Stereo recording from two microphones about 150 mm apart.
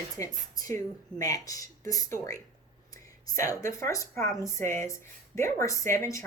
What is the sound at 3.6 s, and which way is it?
A woman's voice, 20° left (ahead or behind).